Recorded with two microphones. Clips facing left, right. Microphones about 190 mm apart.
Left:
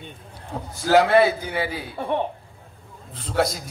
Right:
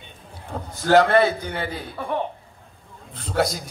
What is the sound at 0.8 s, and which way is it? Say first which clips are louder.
A man's voice: even; 5° left (ahead or behind).